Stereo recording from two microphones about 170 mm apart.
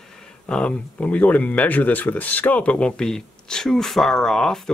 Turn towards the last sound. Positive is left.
turn(degrees=5)  # may be behind; listen again after turning